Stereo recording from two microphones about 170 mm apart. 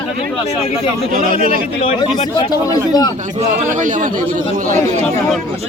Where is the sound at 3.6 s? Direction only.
45° right (ahead or behind).